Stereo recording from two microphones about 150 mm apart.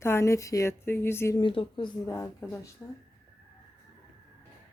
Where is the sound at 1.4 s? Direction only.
35° left (ahead or behind).